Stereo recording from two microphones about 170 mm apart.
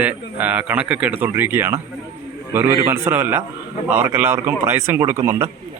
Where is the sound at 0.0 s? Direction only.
10° right (ahead or behind).